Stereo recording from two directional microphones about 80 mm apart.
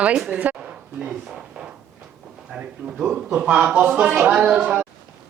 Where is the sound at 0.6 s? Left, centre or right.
Centre.